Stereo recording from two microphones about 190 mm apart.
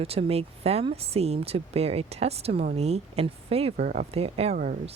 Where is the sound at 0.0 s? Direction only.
30° right (ahead or behind).